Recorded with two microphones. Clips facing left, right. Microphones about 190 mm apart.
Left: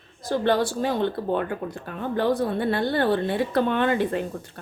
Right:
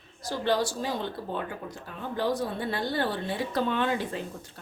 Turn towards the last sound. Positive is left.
turn(degrees=60)  # may be behind; listen again after turning